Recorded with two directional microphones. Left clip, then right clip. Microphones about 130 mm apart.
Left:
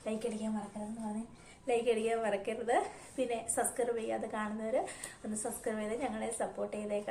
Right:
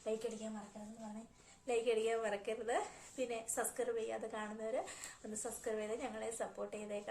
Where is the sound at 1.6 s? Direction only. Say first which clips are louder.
Left 4 dB; 25° right (ahead or behind).